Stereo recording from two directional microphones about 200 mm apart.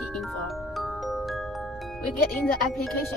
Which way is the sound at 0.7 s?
Centre (ahead or behind).